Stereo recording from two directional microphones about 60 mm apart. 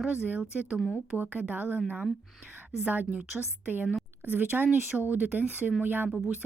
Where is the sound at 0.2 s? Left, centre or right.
Right.